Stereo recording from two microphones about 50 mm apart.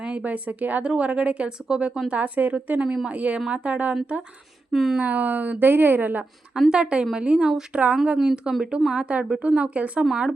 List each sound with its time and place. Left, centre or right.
0.1 s speech: right
2.0 s speech: right
2.8 s a woman's voice: centre
3.1 s speech: right
4.7 s a woman's voice: centre
4.9 s speech: right
6.7 s a woman's voice: centre
8.3 s a woman's voice: centre
8.9 s a woman's voice: centre